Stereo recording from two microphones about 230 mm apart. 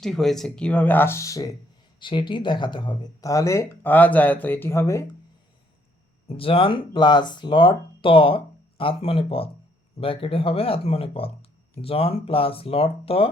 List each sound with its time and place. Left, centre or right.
0.0 s speech: centre
6.2 s speech: left